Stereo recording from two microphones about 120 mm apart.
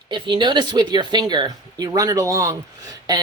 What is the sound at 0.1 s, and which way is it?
Speech, 40° right (ahead or behind).